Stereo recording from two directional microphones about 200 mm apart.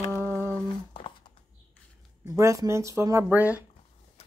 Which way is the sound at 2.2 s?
15° right (ahead or behind).